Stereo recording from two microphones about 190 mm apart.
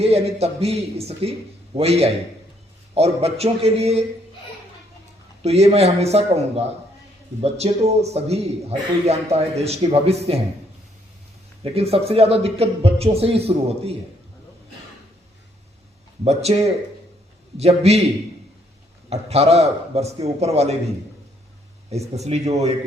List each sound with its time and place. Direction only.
0.0 s a man's voice: 35° right (ahead or behind)
5.4 s a man's voice: 35° right (ahead or behind)
11.6 s a man's voice: 30° right (ahead or behind)
16.2 s a man's voice: 35° right (ahead or behind)
19.1 s a man's voice: 35° right (ahead or behind)
21.8 s a man's voice: 35° right (ahead or behind)